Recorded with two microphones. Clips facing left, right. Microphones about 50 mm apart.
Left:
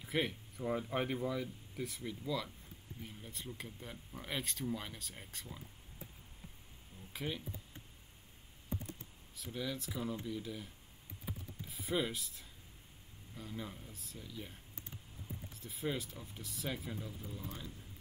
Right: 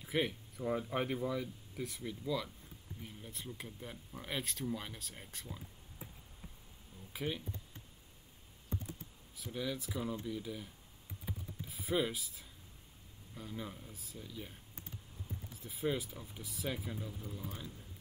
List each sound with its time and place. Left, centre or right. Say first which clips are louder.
0.0 s speech: right 1 dB; centre
7.1 s speech: right 2 dB; centre
9.4 s speech: right 1 dB; centre
11.2 s typing: right 1 dB; centre
13.3 s speech: right 1 dB; centre